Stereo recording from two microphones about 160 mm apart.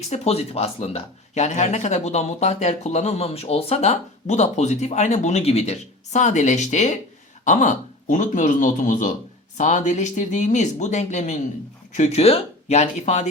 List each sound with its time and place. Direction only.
0.1 s speech: 40° left (ahead or behind)